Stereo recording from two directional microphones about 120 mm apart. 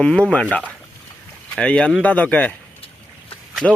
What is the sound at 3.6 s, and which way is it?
Speech, 5° left (ahead or behind).